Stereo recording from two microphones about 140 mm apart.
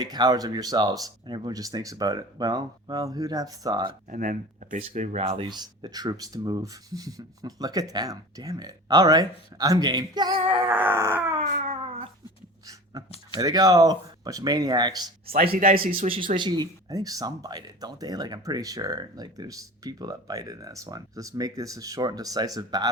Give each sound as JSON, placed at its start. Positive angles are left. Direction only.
{"t": 0.0, "sound": "speech", "side_deg": -30}
{"t": 4.1, "sound": "speech", "side_deg": -70}
{"t": 4.8, "sound": "speech", "side_deg": -50}
{"t": 10.7, "sound": "a sound", "side_deg": -15}
{"t": 11.4, "sound": "a sound", "side_deg": -65}
{"t": 11.8, "sound": "cat", "side_deg": -45}
{"t": 12.6, "sound": "speech", "side_deg": -25}
{"t": 16.0, "sound": "speech", "side_deg": -40}